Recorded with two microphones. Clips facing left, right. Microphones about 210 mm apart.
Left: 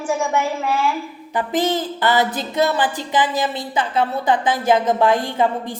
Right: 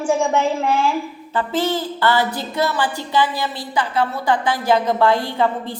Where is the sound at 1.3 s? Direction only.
15° left (ahead or behind).